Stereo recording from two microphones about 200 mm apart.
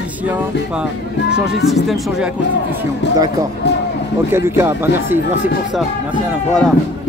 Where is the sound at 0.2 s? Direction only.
5° right (ahead or behind).